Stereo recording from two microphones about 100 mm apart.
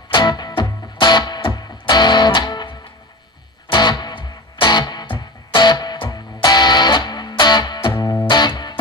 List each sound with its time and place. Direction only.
0.1 s music: 45° left (ahead or behind)
7.9 s music: 35° left (ahead or behind)